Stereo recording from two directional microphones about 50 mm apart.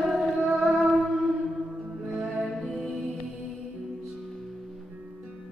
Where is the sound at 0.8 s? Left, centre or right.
Centre.